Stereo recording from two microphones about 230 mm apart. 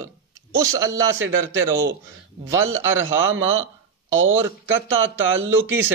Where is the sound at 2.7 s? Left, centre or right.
Right.